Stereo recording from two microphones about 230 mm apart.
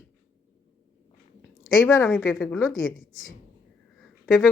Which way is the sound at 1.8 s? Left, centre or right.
Centre.